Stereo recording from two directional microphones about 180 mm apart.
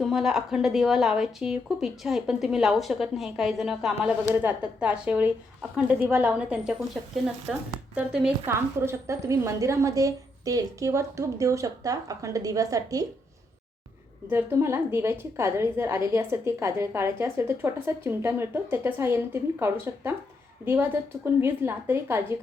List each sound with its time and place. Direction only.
0.0 s a woman's voice: centre (ahead or behind); by 13.1 s 20° right (ahead or behind)
14.3 s a woman's voice: 15° right (ahead or behind)